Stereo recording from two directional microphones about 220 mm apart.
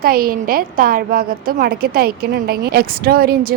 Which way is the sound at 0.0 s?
40° right (ahead or behind).